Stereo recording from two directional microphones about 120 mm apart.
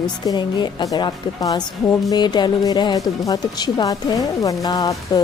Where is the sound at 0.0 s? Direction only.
35° left (ahead or behind).